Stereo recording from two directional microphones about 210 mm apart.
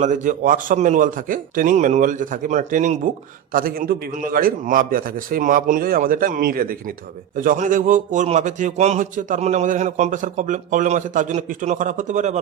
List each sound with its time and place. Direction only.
0.0 s a man's voice: 35° right (ahead or behind)